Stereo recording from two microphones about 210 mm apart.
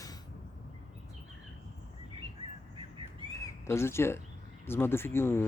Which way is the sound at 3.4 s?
15° left (ahead or behind).